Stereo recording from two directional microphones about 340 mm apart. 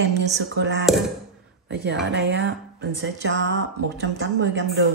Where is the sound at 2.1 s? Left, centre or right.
Right.